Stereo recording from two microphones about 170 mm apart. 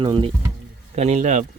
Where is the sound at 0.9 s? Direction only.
40° right (ahead or behind).